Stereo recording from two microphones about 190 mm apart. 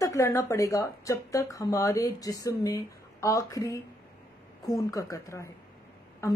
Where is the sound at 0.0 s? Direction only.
15° left (ahead or behind).